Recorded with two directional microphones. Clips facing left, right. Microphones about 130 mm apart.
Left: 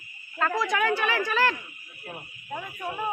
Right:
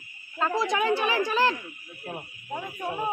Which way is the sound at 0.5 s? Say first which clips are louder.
Right 2 dB; 30° right (ahead or behind).